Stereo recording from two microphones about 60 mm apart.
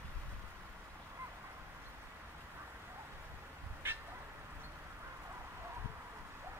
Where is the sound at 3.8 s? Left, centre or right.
Right.